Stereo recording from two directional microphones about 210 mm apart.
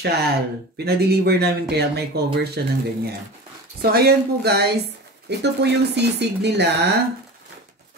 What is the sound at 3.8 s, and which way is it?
Speech, 45° right (ahead or behind).